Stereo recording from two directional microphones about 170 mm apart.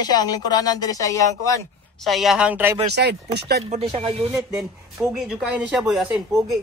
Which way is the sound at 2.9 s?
80° right.